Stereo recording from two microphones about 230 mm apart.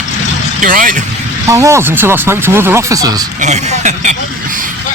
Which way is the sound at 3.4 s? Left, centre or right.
Right.